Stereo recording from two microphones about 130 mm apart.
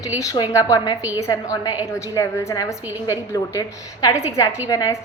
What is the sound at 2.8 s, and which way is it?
Speech, 15° right (ahead or behind).